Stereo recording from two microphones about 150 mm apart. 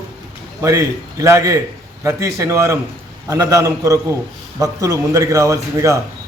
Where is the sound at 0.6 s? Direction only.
20° right (ahead or behind).